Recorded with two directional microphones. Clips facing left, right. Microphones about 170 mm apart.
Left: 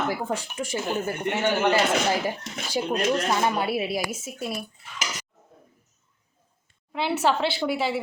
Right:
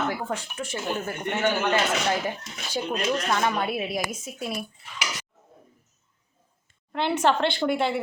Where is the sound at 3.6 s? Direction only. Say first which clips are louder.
Left 2 dB; 5° left (ahead or behind).